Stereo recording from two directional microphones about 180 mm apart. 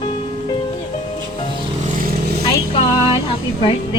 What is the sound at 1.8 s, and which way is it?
Vehicle, 50° right (ahead or behind).